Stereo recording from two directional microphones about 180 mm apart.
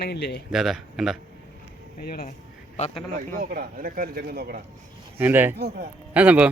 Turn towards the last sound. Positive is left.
turn(degrees=-10)  # may be behind; listen again after turning